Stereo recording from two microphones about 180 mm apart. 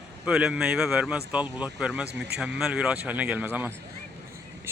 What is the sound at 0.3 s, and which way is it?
Speech, 5° right (ahead or behind).